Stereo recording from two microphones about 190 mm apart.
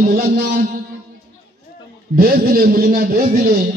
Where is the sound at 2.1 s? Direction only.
50° right (ahead or behind).